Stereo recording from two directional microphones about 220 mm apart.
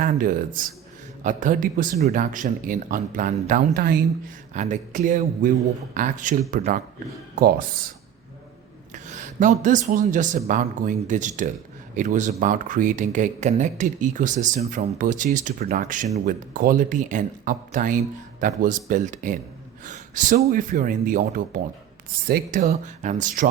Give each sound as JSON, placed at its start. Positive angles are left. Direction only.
{"t": 0.0, "sound": "speech", "side_deg": -40}
{"t": 9.0, "sound": "speech", "side_deg": -35}